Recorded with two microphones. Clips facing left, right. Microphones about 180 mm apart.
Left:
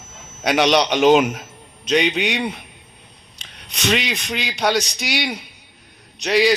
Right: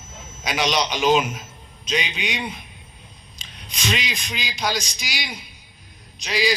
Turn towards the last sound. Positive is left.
turn(degrees=65)  # may be behind; listen again after turning